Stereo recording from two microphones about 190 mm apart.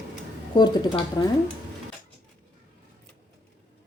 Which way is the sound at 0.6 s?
25° left (ahead or behind).